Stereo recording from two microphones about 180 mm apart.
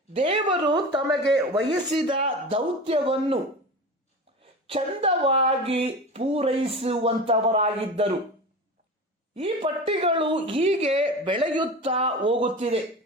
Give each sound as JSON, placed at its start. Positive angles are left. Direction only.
{"t": 0.1, "sound": "speech", "side_deg": -30}
{"t": 4.6, "sound": "speech", "side_deg": -30}
{"t": 9.3, "sound": "speech", "side_deg": -30}